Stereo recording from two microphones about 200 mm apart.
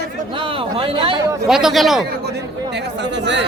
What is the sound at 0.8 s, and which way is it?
Speech, 25° right (ahead or behind).